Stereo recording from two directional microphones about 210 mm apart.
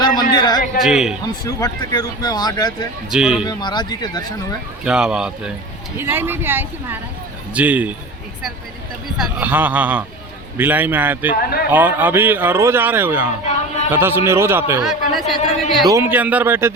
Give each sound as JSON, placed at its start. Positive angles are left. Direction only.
{"t": 0.0, "sound": "a sound", "side_deg": 20}
{"t": 0.8, "sound": "a man's voice", "side_deg": 0}
{"t": 1.2, "sound": "speech", "side_deg": 15}
{"t": 3.1, "sound": "a man's voice", "side_deg": -5}
{"t": 3.4, "sound": "speech", "side_deg": 20}
{"t": 4.8, "sound": "a man's voice", "side_deg": -5}
{"t": 9.1, "sound": "a man's voice", "side_deg": -5}
{"t": 15.9, "sound": "a man's voice", "side_deg": -10}